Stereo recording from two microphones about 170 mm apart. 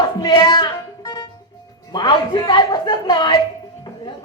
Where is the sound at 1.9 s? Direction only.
25° left (ahead or behind).